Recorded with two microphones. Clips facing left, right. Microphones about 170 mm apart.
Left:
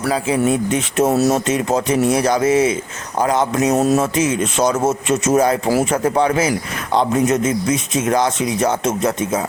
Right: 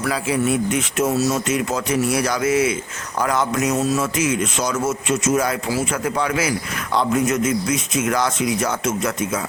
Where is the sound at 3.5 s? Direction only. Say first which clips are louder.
Left 5 dB; 35° left (ahead or behind).